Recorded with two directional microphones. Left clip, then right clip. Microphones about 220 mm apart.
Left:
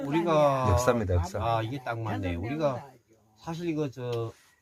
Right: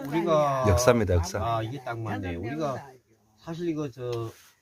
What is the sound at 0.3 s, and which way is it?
Speech, 35° left (ahead or behind).